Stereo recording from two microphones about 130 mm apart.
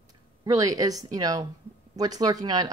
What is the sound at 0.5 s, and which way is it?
Speech, 30° right (ahead or behind).